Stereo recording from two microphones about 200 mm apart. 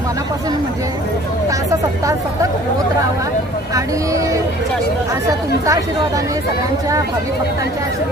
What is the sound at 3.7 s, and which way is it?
Speech, 15° right (ahead or behind).